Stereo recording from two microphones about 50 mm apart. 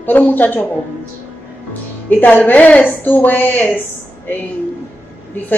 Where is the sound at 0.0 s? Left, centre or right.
Left.